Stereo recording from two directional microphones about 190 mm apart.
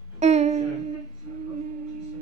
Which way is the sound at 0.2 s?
35° right (ahead or behind).